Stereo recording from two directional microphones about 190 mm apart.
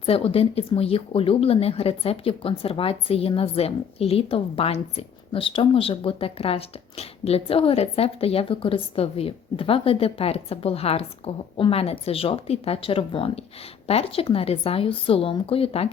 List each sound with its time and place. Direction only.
0.0 s a woman's voice: 30° left (ahead or behind)